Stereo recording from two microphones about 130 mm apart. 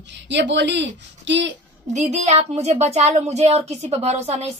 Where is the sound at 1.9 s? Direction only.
60° right (ahead or behind).